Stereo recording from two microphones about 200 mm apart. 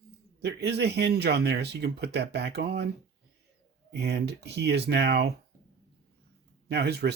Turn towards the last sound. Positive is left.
turn(degrees=-55)  # may be behind; listen again after turning